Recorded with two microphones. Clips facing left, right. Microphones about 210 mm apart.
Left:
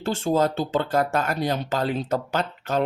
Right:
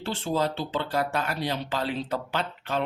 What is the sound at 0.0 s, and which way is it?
Speech, 45° left (ahead or behind).